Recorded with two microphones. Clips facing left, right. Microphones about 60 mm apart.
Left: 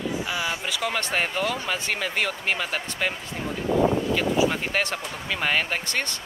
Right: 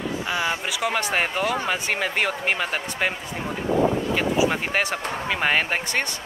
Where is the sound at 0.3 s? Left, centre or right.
Right.